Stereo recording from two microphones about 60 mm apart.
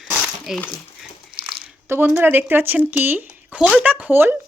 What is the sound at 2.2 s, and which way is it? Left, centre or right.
Speech, right.